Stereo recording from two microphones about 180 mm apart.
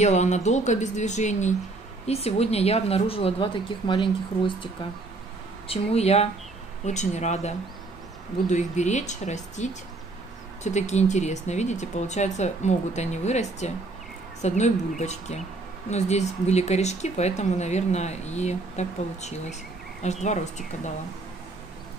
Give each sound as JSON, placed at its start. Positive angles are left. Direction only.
{"t": 0.0, "sound": "speech", "side_deg": 40}
{"t": 5.7, "sound": "speech", "side_deg": 35}